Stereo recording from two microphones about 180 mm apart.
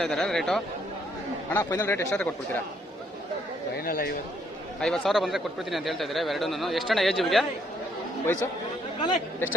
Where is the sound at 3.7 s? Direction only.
55° left (ahead or behind).